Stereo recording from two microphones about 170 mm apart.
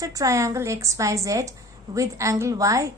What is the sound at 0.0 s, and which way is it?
A woman's voice, 20° right (ahead or behind).